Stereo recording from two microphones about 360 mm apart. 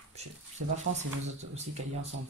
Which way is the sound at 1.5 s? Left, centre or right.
Centre.